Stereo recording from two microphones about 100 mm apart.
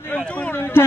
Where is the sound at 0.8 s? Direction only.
25° left (ahead or behind).